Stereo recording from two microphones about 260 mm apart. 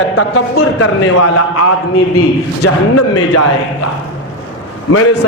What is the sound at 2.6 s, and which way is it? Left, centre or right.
Speech, left.